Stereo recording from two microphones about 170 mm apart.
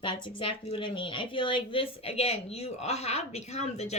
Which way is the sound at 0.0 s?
30° left (ahead or behind).